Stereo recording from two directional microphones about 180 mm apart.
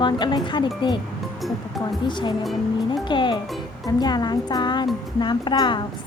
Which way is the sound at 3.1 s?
25° left (ahead or behind).